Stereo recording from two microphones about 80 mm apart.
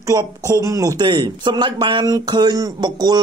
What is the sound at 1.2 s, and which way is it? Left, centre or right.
Speech, right.